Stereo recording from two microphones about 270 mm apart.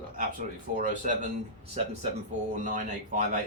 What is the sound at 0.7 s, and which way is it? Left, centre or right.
Speech, right.